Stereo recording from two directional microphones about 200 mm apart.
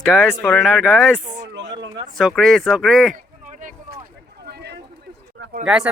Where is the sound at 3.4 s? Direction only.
40° right (ahead or behind).